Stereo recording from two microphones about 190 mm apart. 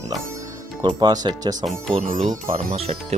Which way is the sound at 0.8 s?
20° right (ahead or behind).